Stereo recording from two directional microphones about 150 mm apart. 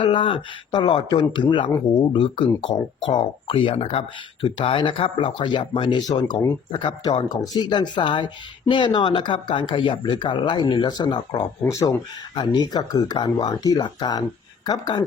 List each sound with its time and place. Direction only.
0.0 s speech: 35° left (ahead or behind)